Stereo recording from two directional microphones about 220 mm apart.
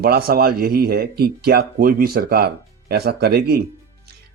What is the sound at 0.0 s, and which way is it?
A man's voice, 45° right (ahead or behind).